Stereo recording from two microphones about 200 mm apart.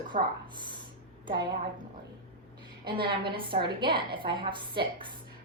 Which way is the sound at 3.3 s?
25° right (ahead or behind).